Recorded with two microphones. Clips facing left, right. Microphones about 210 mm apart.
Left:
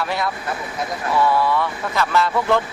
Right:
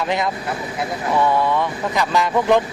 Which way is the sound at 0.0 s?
20° right (ahead or behind).